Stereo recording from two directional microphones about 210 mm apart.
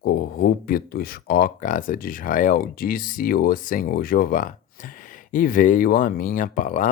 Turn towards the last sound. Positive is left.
turn(degrees=40)  # may be behind; listen again after turning